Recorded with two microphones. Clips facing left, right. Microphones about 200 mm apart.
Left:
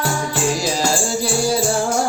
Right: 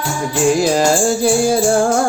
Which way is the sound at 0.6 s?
55° right (ahead or behind).